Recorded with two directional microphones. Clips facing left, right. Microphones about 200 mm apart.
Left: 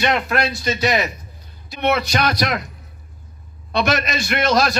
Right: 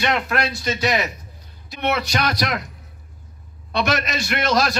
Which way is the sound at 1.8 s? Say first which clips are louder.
Left 3 dB; 60° left (ahead or behind).